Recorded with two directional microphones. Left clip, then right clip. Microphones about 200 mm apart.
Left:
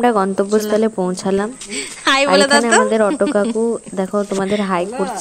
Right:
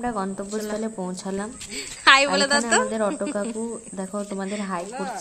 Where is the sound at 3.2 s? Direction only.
40° left (ahead or behind).